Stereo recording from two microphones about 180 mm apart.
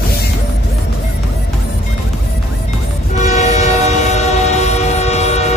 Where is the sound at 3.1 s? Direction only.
40° left (ahead or behind).